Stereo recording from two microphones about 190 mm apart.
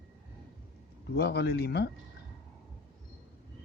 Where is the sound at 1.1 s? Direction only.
60° left (ahead or behind).